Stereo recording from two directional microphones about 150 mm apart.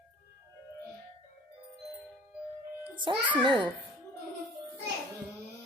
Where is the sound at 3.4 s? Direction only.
30° right (ahead or behind).